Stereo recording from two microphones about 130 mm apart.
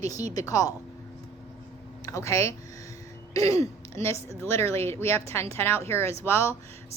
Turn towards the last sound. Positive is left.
turn(degrees=20)  # may be behind; listen again after turning